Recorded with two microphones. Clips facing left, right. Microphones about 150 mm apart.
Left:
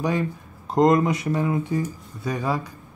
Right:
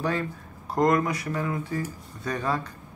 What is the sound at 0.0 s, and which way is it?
Speech, 15° left (ahead or behind).